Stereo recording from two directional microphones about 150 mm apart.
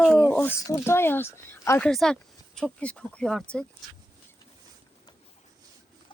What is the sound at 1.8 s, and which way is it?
Speech, 5° left (ahead or behind).